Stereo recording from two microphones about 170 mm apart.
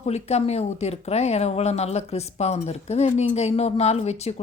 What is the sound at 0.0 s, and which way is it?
Speech, 40° left (ahead or behind).